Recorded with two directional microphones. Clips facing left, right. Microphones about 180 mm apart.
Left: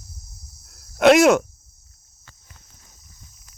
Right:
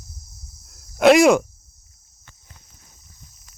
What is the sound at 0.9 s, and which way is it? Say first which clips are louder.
Cricket: right 1 dB; centre (ahead or behind).